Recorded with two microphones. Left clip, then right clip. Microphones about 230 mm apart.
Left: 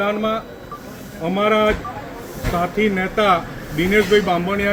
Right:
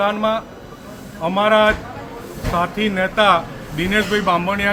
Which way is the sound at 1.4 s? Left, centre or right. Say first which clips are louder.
Right 3 dB; right.